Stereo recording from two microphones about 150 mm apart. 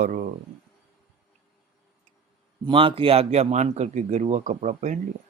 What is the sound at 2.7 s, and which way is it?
A man's voice, 35° right (ahead or behind).